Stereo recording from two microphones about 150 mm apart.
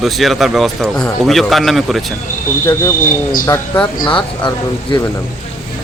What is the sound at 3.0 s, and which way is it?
Speech, 65° left (ahead or behind).